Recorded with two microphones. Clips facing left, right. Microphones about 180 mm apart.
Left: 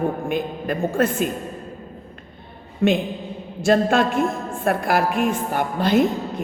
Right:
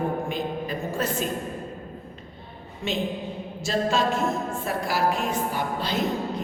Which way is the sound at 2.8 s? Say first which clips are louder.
Left 8 dB; 55° left (ahead or behind).